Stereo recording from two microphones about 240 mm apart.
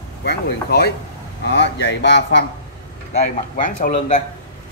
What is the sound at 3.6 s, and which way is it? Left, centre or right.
Speech, left.